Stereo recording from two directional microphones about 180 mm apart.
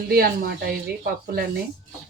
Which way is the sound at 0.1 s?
55° right (ahead or behind).